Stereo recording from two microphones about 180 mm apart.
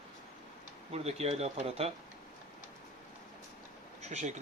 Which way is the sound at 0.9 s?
35° right (ahead or behind).